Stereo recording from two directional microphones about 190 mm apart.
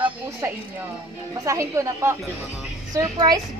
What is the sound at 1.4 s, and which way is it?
A woman's voice, 15° right (ahead or behind).